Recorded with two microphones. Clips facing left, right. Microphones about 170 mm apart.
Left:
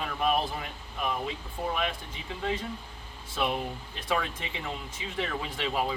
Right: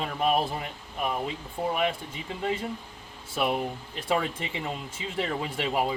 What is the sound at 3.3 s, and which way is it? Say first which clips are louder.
Speech: right 3 dB; 15° right (ahead or behind).